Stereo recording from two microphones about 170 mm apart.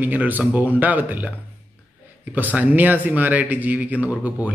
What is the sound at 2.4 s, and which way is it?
A man's voice, 10° right (ahead or behind).